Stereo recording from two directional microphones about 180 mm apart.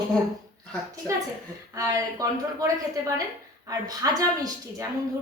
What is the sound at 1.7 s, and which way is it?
Speech, 20° right (ahead or behind).